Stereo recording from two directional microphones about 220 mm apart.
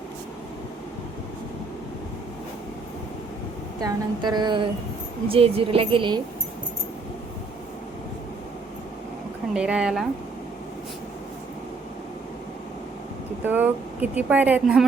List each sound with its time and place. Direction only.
3.8 s a woman's voice: 20° right (ahead or behind)
9.6 s speech: 5° right (ahead or behind)
13.4 s speech: 10° right (ahead or behind)